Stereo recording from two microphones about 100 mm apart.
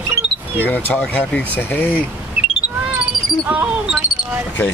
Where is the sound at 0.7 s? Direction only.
15° left (ahead or behind).